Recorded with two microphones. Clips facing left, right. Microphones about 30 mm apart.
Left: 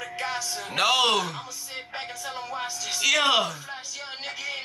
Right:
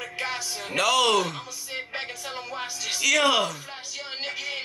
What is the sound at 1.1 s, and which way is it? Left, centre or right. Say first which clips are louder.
Speech: right 2 dB; centre.